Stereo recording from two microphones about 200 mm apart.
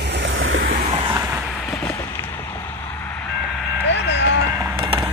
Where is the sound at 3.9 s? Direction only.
60° left (ahead or behind).